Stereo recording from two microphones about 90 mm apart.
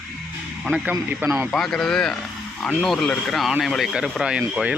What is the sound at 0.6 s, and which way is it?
Speech, 5° right (ahead or behind).